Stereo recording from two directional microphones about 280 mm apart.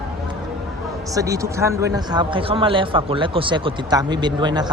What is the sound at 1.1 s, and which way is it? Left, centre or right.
A man's voice, centre.